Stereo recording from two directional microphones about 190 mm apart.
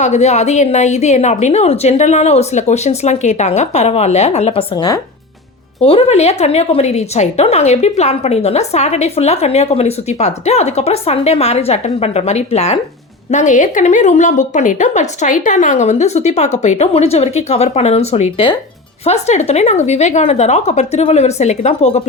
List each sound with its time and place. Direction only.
0.0 s speech: 35° left (ahead or behind)